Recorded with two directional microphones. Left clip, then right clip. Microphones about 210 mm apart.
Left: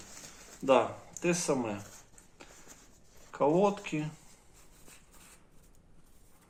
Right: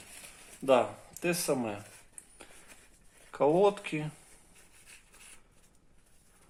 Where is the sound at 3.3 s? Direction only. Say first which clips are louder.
Right 2 dB; 45° right (ahead or behind).